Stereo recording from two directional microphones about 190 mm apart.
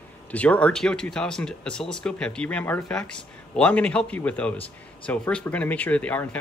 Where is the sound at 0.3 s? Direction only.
10° left (ahead or behind).